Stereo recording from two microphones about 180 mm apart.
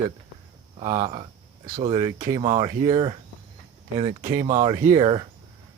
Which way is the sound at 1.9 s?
30° right (ahead or behind).